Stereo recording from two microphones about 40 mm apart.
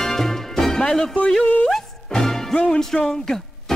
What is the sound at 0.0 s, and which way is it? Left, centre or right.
Music, centre.